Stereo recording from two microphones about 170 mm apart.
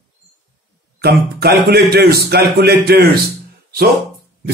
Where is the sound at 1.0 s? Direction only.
65° right (ahead or behind).